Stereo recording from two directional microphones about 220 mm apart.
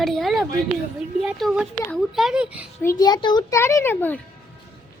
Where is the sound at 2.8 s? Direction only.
15° left (ahead or behind).